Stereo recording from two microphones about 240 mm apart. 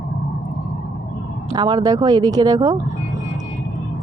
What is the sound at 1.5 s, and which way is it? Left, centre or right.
Speech, centre.